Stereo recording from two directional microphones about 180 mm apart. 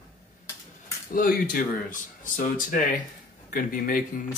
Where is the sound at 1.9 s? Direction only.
45° left (ahead or behind).